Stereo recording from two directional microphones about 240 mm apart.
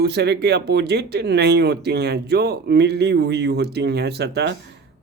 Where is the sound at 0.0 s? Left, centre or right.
Right.